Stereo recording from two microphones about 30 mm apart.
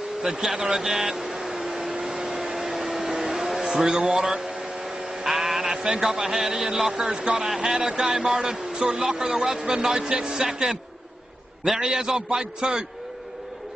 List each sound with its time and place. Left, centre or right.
0.2 s speech: centre
2.0 s hair dryer: right
2.5 s vacuum cleaner: centre
3.0 s vehicle: right
3.3 s a sound: centre
4.1 s a man's voice: centre
4.8 s a sound: right
5.2 s a sound: centre
6.0 s a man's voice: centre
11.8 s a man's voice: right